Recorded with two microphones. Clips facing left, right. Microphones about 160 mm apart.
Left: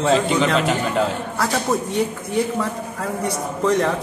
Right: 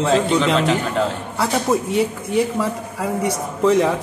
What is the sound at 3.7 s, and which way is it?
Speech, 5° right (ahead or behind).